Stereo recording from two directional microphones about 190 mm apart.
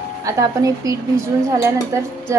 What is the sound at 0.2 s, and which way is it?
A woman's voice, 20° right (ahead or behind).